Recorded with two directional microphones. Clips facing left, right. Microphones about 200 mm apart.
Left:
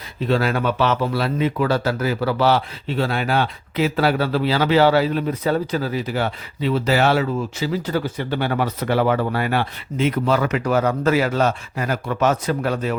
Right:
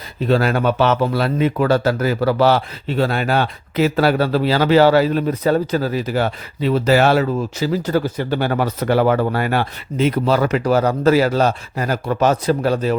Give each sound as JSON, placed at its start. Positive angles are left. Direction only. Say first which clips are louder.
{"t": 0.3, "sound": "speech", "louder": "right 3 dB", "side_deg": -45}